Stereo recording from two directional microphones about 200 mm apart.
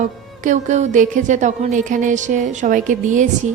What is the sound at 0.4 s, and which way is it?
Speech, 35° right (ahead or behind).